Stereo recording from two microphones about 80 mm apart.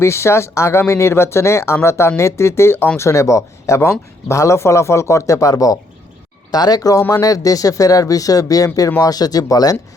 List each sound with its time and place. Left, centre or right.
0.0 s speech: left
3.0 s speech: left